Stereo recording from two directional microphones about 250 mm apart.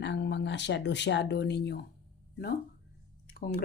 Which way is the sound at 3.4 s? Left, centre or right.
Left.